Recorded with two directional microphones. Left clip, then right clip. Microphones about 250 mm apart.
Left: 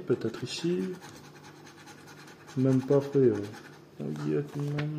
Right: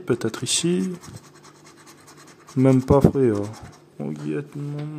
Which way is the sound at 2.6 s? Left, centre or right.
Right.